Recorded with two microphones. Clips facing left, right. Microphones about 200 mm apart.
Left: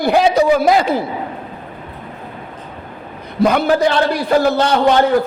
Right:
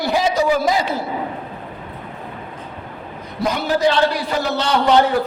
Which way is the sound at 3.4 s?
60° left (ahead or behind).